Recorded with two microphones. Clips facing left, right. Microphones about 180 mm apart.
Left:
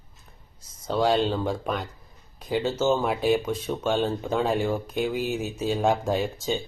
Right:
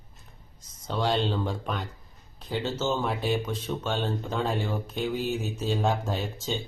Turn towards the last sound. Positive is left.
turn(degrees=10)  # may be behind; listen again after turning